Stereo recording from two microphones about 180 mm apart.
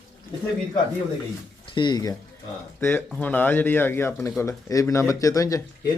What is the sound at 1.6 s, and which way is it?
Speech, 25° left (ahead or behind).